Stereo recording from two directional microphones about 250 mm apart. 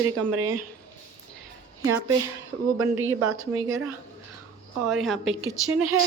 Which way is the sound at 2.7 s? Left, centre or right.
Right.